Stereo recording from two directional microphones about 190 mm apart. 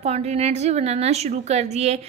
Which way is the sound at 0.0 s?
35° right (ahead or behind).